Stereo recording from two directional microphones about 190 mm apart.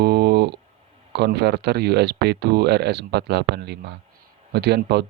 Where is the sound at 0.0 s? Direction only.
60° right (ahead or behind).